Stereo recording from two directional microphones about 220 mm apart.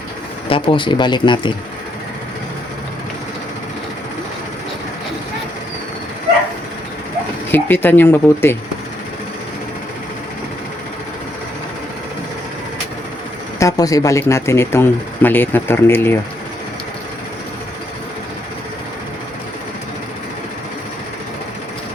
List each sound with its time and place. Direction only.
0.4 s speech: 25° left (ahead or behind)
7.5 s speech: 10° left (ahead or behind)
13.6 s speech: 15° left (ahead or behind)